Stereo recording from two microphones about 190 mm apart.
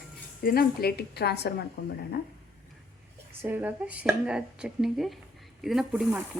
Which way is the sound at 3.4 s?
10° right (ahead or behind).